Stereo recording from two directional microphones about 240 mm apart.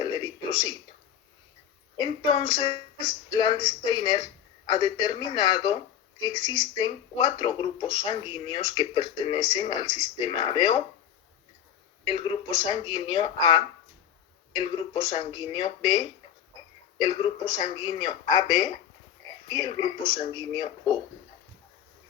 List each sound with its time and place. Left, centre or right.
0.0 s a sound: centre
2.0 s a man's voice: left
12.0 s a man's voice: centre